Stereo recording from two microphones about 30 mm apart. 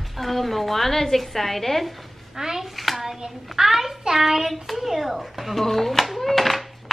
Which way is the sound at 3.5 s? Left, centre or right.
Centre.